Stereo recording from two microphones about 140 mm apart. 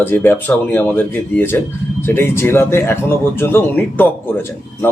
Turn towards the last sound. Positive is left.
turn(degrees=15)  # may be behind; listen again after turning